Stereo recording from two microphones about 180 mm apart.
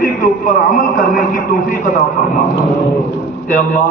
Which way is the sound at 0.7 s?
50° left (ahead or behind).